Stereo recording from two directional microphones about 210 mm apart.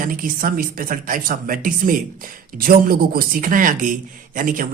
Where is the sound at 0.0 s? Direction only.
40° right (ahead or behind).